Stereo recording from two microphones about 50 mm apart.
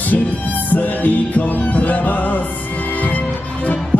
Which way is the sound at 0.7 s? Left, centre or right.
Left.